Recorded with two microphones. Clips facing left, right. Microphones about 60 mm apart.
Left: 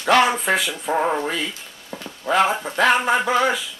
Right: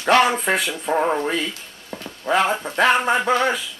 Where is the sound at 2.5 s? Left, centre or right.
Centre.